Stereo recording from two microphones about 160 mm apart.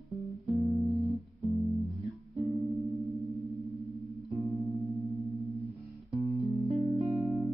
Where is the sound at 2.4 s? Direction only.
20° right (ahead or behind).